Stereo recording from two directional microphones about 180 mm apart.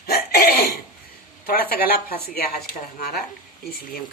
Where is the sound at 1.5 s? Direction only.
55° left (ahead or behind).